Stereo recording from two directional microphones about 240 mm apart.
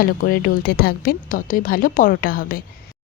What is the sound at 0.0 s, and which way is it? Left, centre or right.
Speech, left.